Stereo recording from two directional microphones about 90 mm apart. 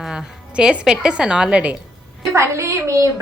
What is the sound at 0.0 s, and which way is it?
A woman's voice, 5° right (ahead or behind).